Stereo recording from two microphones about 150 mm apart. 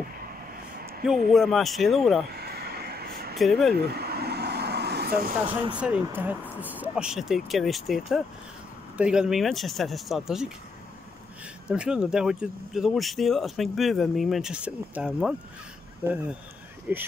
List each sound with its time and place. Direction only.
1.0 s speech: centre (ahead or behind)
2.3 s a sound: 90° right
3.3 s speech: centre (ahead or behind)
3.7 s vehicle: 90° right
5.8 s speech: 10° right (ahead or behind)
11.6 s speech: 5° right (ahead or behind)
16.9 s speech: 10° right (ahead or behind)